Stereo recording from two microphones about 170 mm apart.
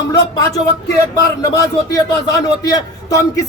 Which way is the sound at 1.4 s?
20° left (ahead or behind).